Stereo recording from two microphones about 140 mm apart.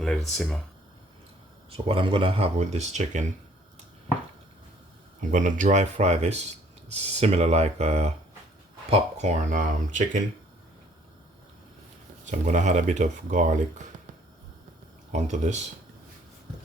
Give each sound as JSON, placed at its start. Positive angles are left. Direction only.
{"t": 0.0, "sound": "speech", "side_deg": 5}
{"t": 1.7, "sound": "speech", "side_deg": -40}
{"t": 5.3, "sound": "speech", "side_deg": -65}
{"t": 12.2, "sound": "speech", "side_deg": -60}
{"t": 15.1, "sound": "speech", "side_deg": -55}